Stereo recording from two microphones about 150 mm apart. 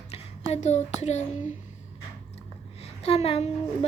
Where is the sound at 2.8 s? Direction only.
45° left (ahead or behind).